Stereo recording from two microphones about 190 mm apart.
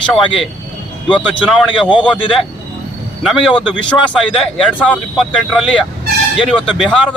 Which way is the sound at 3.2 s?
Centre (ahead or behind).